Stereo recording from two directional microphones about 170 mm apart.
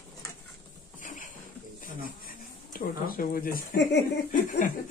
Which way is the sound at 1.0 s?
50° left (ahead or behind).